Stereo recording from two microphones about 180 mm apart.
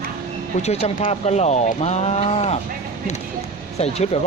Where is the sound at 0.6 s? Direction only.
35° left (ahead or behind).